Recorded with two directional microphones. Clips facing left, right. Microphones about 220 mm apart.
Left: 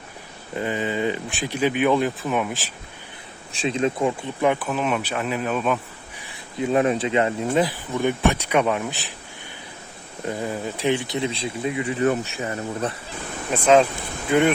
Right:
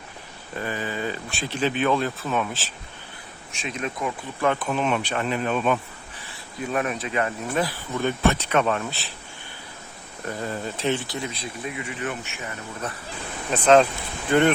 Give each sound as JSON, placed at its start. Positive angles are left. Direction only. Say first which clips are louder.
{"t": 0.5, "sound": "speech", "louder": "left 5 dB", "side_deg": 20}
{"t": 3.5, "sound": "speech", "louder": "left 8 dB", "side_deg": 30}
{"t": 4.4, "sound": "speech", "louder": "left 1 dB", "side_deg": 5}
{"t": 6.2, "sound": "speech", "louder": "left 6 dB", "side_deg": 20}
{"t": 10.2, "sound": "speech", "louder": "left 3 dB", "side_deg": 15}
{"t": 13.5, "sound": "speech", "louder": "even", "side_deg": 10}